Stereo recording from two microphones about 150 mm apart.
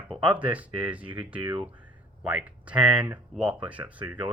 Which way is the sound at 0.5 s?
10° right (ahead or behind).